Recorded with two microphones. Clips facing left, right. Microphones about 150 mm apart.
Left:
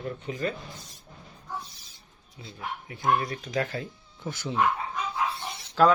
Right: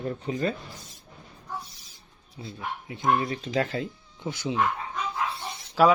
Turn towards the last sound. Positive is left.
turn(degrees=-10)  # may be behind; listen again after turning